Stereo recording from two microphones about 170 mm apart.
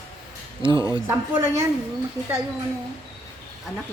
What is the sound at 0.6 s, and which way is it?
Speech, 30° right (ahead or behind).